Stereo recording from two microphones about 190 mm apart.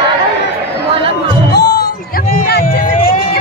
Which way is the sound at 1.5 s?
60° left (ahead or behind).